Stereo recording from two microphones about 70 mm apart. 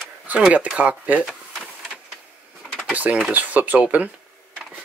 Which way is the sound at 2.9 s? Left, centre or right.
Right.